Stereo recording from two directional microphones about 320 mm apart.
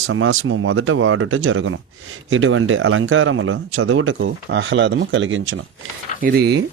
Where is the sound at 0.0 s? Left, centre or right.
Right.